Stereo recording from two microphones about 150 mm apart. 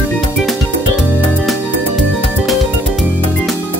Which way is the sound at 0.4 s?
Centre (ahead or behind).